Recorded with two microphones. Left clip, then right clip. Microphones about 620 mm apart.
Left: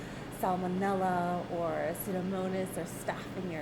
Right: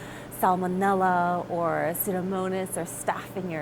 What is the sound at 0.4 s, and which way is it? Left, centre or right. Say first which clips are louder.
A woman's voice: right 9 dB; right.